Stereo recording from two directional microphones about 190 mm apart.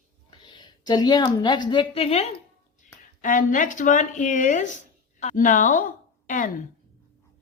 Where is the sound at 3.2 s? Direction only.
45° left (ahead or behind).